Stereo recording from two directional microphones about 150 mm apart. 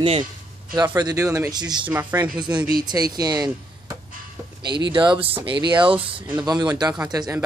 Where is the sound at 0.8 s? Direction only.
25° right (ahead or behind).